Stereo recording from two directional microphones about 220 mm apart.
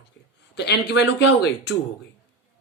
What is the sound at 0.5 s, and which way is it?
Speech, 50° left (ahead or behind).